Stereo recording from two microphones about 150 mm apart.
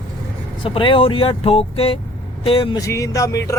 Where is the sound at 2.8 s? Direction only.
20° left (ahead or behind).